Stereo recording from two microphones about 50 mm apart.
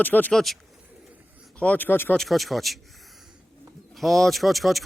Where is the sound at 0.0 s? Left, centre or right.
Left.